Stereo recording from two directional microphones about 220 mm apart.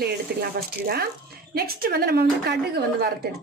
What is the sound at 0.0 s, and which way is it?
A woman's voice, 45° right (ahead or behind).